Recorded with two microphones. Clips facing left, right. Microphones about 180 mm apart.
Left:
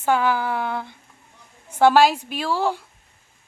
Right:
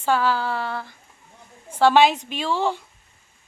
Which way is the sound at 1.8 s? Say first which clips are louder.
Left 1 dB; 5° left (ahead or behind).